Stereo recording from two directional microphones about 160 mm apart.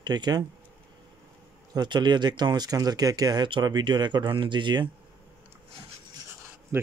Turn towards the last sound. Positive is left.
turn(degrees=-15)  # may be behind; listen again after turning